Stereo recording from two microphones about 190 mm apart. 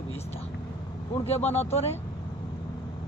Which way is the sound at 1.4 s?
35° left (ahead or behind).